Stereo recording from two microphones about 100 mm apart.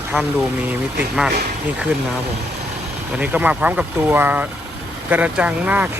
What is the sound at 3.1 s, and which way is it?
Speech, 15° right (ahead or behind).